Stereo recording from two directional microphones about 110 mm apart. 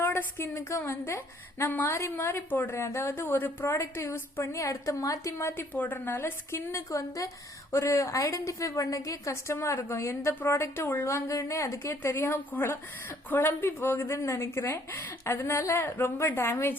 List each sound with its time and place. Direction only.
0.0 s a woman's voice: 20° left (ahead or behind)